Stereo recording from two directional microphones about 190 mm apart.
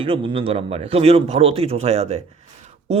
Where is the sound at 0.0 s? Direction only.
25° right (ahead or behind).